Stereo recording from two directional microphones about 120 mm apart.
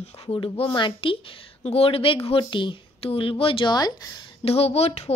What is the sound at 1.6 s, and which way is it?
A woman's voice, 55° left (ahead or behind).